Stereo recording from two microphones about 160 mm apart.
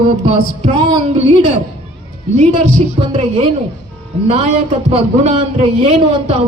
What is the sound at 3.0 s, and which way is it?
A man's voice, 40° right (ahead or behind).